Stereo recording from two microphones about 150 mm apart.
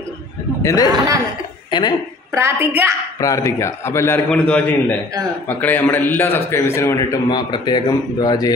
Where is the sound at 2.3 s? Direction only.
15° right (ahead or behind).